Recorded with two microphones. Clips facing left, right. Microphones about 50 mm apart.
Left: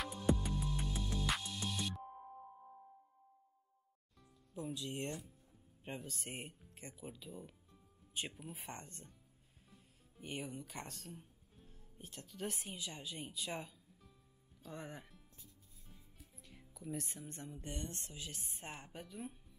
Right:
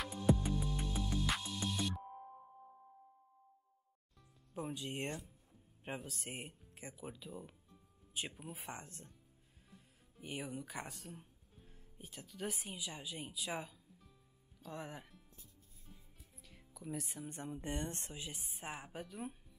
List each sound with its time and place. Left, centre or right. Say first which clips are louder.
0.0 s music: right 2 dB; centre
4.6 s speech: right 1 dB; right
5.9 s speech: right 2 dB; centre
15.9 s music: even; centre
17.4 s speech: right 5 dB; right
18.4 s speech: right 3 dB; centre